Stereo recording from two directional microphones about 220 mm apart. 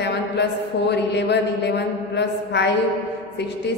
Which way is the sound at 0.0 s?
50° left (ahead or behind).